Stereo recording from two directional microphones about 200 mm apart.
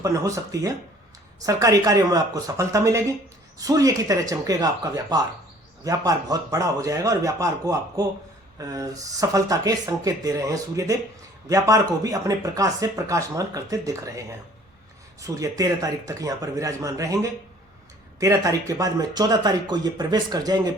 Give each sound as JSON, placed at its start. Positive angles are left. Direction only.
{"t": 0.0, "sound": "speech", "side_deg": -15}